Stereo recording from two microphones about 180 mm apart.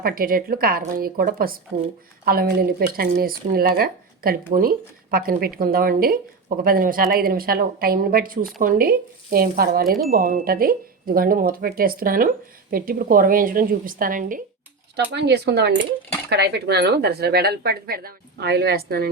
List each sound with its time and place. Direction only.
0.0 s speech: 55° right (ahead or behind)
14.9 s speech: 70° right (ahead or behind)